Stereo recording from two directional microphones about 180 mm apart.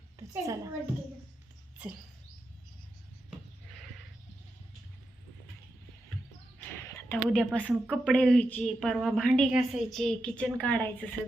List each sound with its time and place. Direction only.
0.2 s a woman's voice: 20° right (ahead or behind)
6.8 s a sound: 10° left (ahead or behind)
7.3 s a woman's voice: 5° left (ahead or behind)